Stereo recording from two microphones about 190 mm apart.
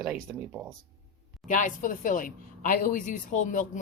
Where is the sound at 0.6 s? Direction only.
5° right (ahead or behind).